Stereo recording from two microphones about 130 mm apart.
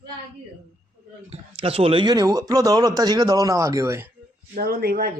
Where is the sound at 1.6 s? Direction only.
50° right (ahead or behind); by 4.1 s 20° right (ahead or behind).